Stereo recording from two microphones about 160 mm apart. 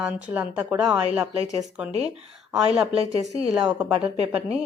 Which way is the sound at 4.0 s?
40° right (ahead or behind).